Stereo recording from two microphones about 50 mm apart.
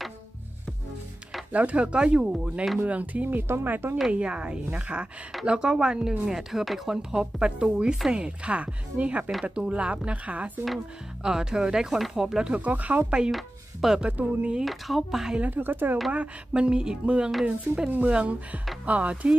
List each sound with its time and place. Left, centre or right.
1.5 s speech: right
2.8 s speech: right
4.1 s a woman's voice: right; by 7.0 s centre
7.0 s a woman's voice: centre
11.2 s a woman's voice: centre
12.5 s speech: right
13.3 s speech: centre
14.0 s speech: right
14.6 s speech: centre
15.5 s speech: right
16.1 s speech: right